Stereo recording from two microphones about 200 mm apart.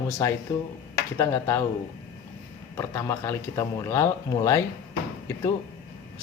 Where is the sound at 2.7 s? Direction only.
15° left (ahead or behind).